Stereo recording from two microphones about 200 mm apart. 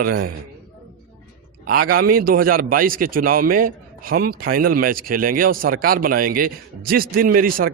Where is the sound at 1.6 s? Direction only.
45° right (ahead or behind).